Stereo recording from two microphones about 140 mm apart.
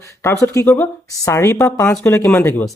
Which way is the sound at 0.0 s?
20° left (ahead or behind).